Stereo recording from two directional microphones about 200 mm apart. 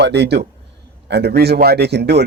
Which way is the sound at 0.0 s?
55° right (ahead or behind).